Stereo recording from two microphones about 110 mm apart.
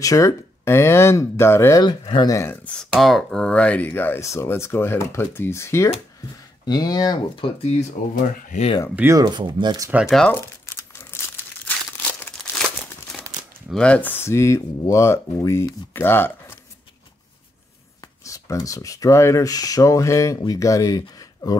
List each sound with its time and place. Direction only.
0.0 s speech: 30° left (ahead or behind)
1.8 s speech: 45° left (ahead or behind)
2.2 s speech: 30° left (ahead or behind)
2.5 s speech: 10° left (ahead or behind)
3.0 s speech: centre (ahead or behind); by 5.9 s 25° left (ahead or behind)
6.6 s speech: 40° left (ahead or behind)
7.4 s speech: 55° left (ahead or behind)
9.1 s speech: 40° right (ahead or behind)
10.0 s speech: 5° left (ahead or behind)
10.3 s crumpling: 20° left (ahead or behind)
12.4 s crumpling: 5° left (ahead or behind)
13.7 s speech: 10° left (ahead or behind)
18.2 s speech: 30° left (ahead or behind)